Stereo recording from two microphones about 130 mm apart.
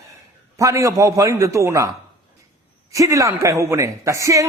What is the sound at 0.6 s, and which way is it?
A man's voice, 25° right (ahead or behind).